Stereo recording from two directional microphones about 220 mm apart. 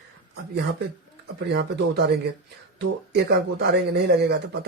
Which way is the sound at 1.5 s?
50° right (ahead or behind).